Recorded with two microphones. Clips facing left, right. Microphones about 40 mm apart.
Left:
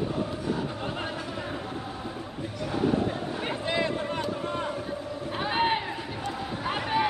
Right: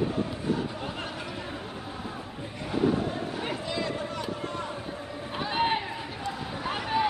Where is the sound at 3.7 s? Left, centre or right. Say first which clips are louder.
Left 6 dB; left.